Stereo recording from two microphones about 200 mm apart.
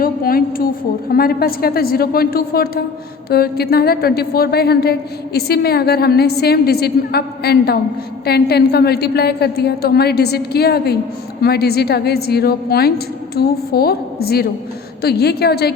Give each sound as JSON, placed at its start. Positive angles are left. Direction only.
{"t": 0.0, "sound": "a woman's voice", "side_deg": 45}